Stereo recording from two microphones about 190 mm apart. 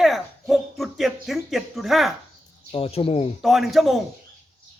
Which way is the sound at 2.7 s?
30° left (ahead or behind).